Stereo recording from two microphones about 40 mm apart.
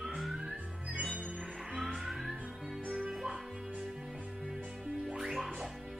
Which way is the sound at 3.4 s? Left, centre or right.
Centre.